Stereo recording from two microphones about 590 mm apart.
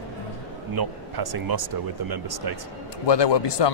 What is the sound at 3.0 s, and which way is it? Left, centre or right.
Speech, left.